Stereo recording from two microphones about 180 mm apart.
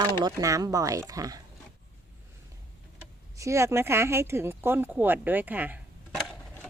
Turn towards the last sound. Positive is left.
turn(degrees=-5)  # may be behind; listen again after turning